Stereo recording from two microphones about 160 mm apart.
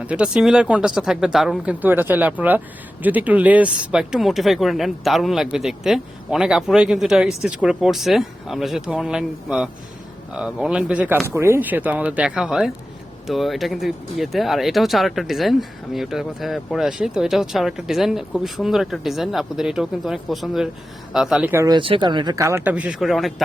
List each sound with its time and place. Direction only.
0.1 s speech: 5° right (ahead or behind)
21.7 s speech: 30° right (ahead or behind); by 23.3 s centre (ahead or behind)